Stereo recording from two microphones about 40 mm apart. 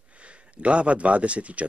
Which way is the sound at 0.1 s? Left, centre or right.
Right.